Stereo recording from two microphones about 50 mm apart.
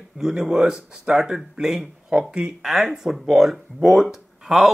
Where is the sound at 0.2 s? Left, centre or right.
Centre.